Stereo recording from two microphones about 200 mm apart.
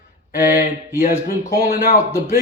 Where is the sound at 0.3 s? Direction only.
45° left (ahead or behind).